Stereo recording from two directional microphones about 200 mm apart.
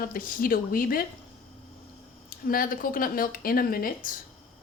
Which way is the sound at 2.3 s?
45° left (ahead or behind).